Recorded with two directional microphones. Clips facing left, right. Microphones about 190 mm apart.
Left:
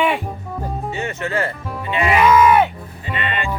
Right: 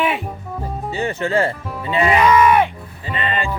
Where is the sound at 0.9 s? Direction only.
30° right (ahead or behind).